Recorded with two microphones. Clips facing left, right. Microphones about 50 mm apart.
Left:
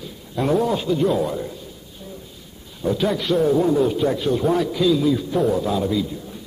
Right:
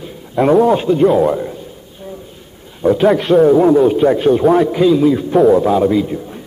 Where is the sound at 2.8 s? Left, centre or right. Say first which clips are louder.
Right 9 dB; right.